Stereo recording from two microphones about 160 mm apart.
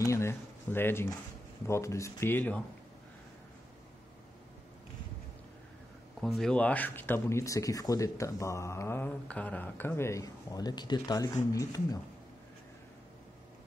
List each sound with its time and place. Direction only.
0.0 s speech: 15° left (ahead or behind)
6.2 s speech: 5° left (ahead or behind); by 12.0 s 20° left (ahead or behind)